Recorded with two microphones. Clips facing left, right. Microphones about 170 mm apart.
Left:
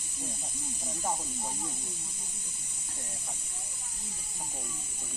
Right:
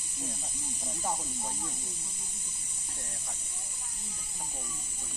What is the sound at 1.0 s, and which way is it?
Speech, 10° left (ahead or behind).